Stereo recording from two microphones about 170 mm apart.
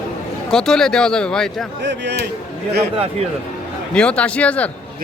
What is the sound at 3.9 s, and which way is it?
Speech, 5° left (ahead or behind).